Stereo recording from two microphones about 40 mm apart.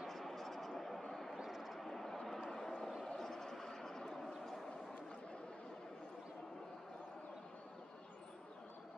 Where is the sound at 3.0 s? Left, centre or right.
Centre.